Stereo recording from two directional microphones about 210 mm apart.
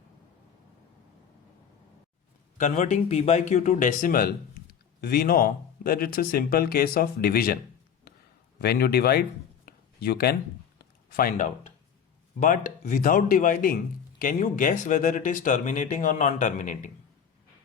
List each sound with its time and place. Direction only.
2.6 s speech: 40° left (ahead or behind)
8.6 s speech: 50° left (ahead or behind)
9.6 s a sound: 45° left (ahead or behind)
11.2 s speech: 40° left (ahead or behind)